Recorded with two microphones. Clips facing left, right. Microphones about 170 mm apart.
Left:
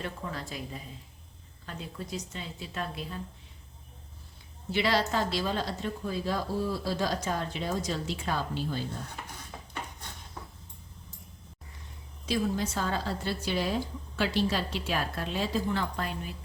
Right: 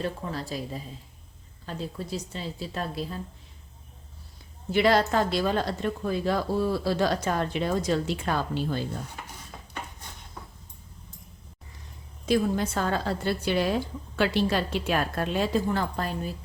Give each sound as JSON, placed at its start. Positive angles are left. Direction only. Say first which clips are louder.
{"t": 0.0, "sound": "a woman's voice", "louder": "right 5 dB", "side_deg": -35}
{"t": 4.7, "sound": "speech", "louder": "right 6 dB", "side_deg": -50}
{"t": 12.2, "sound": "speech", "louder": "right 5 dB", "side_deg": -55}